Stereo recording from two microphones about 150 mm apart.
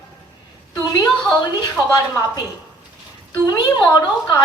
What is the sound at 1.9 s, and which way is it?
Speech, 25° left (ahead or behind).